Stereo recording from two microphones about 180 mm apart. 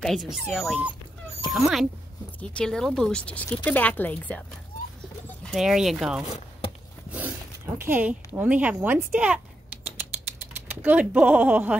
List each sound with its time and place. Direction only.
0.3 s speech: centre (ahead or behind)
6.2 s chopping: 35° left (ahead or behind)
7.1 s a woman's voice: 10° right (ahead or behind)
10.5 s speech: 10° right (ahead or behind)